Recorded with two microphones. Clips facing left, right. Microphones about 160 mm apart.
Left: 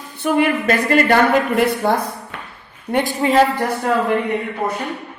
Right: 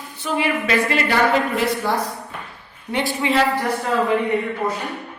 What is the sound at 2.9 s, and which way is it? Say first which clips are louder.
Speech: left 4 dB; 45° left (ahead or behind).